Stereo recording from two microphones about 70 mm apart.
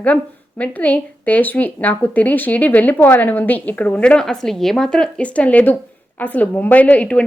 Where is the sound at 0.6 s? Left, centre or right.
Left.